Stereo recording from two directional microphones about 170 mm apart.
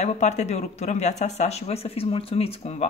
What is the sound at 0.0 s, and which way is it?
Speech, 40° left (ahead or behind).